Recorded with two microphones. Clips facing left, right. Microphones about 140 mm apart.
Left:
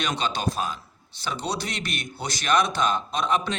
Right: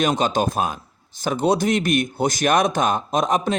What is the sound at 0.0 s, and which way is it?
Speech, 45° right (ahead or behind).